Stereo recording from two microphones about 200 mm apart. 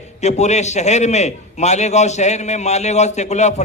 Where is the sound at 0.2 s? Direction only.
35° left (ahead or behind).